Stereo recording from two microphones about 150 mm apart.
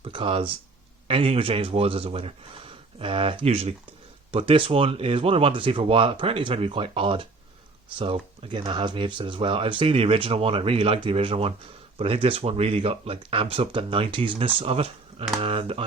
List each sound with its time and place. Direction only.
0.0 s speech: 35° right (ahead or behind)